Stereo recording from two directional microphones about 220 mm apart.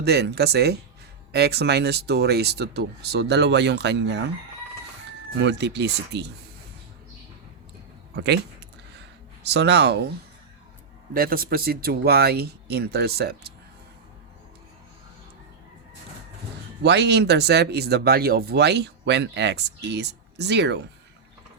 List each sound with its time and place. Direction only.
0.0 s speech: 50° right (ahead or behind)
5.4 s speech: 50° right (ahead or behind)
8.1 s speech: 50° right (ahead or behind)
9.4 s speech: 50° right (ahead or behind)
11.1 s speech: 40° right (ahead or behind)
16.8 s speech: 50° right (ahead or behind)